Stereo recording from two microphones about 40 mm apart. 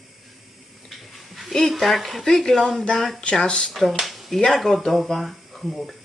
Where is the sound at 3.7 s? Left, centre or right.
Centre.